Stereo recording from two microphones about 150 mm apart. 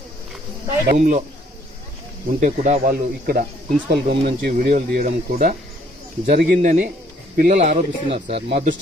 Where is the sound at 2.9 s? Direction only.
80° right; by 6.8 s 60° right (ahead or behind).